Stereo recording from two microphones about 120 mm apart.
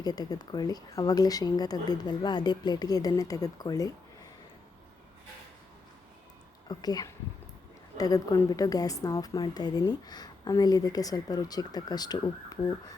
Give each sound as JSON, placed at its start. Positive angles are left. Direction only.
{"t": 0.0, "sound": "a woman's voice", "side_deg": 35}
{"t": 6.7, "sound": "a woman's voice", "side_deg": 35}